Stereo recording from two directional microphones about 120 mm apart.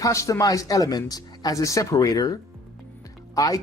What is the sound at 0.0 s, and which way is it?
Speech, 25° left (ahead or behind).